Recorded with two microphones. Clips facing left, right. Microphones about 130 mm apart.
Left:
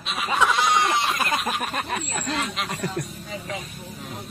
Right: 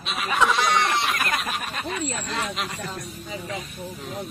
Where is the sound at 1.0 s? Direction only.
25° left (ahead or behind).